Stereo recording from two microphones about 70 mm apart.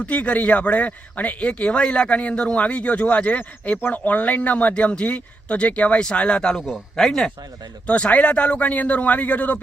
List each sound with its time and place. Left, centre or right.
0.0 s speech: centre
6.6 s a man's voice: centre
6.9 s speech: centre
7.9 s speech: centre